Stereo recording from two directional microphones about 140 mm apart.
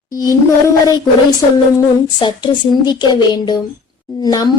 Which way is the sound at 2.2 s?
30° left (ahead or behind).